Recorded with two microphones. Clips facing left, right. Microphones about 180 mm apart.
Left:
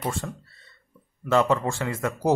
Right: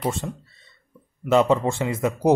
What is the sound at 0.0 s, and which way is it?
Speech, 20° right (ahead or behind).